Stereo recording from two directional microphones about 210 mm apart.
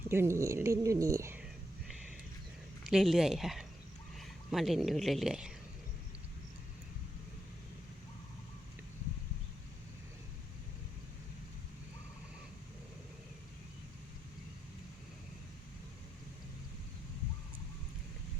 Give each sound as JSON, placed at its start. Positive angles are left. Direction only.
{"t": 0.1, "sound": "speech", "side_deg": -10}
{"t": 2.9, "sound": "speech", "side_deg": 0}